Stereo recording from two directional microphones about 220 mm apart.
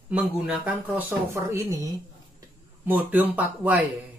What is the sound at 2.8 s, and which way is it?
Speech, 10° right (ahead or behind).